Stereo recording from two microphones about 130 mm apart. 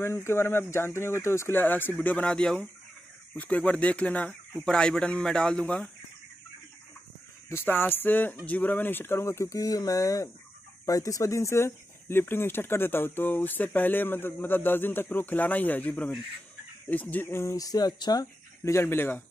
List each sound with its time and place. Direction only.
0.0 s speech: 20° left (ahead or behind)
7.4 s speech: 15° left (ahead or behind)